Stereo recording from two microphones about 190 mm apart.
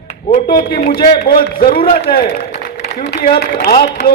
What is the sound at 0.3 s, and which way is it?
A man's voice, 50° left (ahead or behind).